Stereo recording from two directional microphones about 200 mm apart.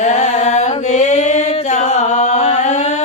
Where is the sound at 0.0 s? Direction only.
35° left (ahead or behind).